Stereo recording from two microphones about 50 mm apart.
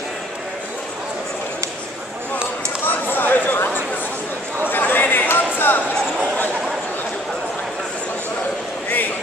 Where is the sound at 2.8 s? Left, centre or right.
Left.